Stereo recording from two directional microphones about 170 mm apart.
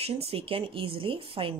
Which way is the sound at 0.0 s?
35° right (ahead or behind).